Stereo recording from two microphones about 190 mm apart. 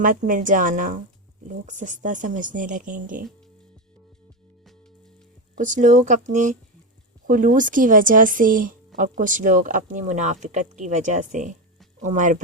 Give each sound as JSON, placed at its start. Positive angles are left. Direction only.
{"t": 0.0, "sound": "speech", "side_deg": -45}
{"t": 5.5, "sound": "speech", "side_deg": -40}